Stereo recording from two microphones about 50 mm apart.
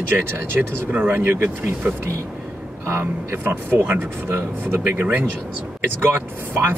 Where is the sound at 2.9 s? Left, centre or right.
Right.